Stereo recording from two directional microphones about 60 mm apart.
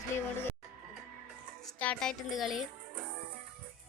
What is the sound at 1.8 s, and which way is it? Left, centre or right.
Speech, left.